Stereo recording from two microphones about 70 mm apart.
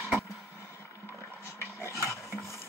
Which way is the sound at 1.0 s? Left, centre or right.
Left.